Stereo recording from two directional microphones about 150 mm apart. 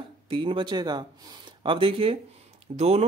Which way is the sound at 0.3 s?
35° right (ahead or behind).